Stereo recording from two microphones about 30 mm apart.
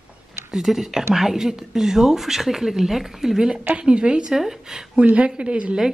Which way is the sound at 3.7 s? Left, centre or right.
Right.